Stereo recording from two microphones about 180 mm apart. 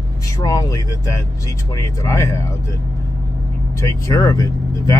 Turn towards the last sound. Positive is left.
turn(degrees=20)  # may be behind; listen again after turning